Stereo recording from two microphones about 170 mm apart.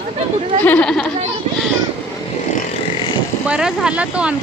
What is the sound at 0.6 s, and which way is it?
Speech, 5° left (ahead or behind).